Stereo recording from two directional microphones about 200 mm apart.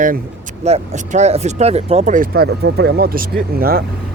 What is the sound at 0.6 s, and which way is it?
Speech, 35° right (ahead or behind).